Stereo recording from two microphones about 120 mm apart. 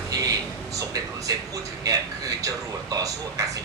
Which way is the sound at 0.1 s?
30° right (ahead or behind).